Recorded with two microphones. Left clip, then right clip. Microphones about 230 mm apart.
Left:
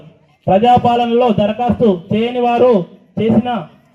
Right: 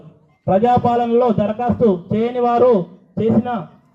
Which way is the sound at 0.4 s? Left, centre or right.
Left.